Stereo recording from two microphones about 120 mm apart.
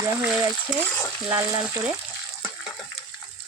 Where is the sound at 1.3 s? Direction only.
30° right (ahead or behind).